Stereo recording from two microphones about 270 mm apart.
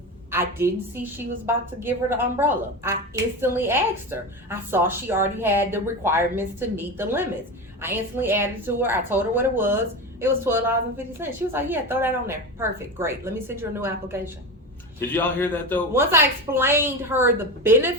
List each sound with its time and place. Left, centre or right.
0.3 s a woman's voice: centre
15.1 s a man's voice: centre
15.9 s a woman's voice: centre